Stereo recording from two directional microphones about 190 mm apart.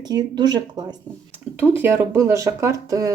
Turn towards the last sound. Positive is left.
turn(degrees=-15)  # may be behind; listen again after turning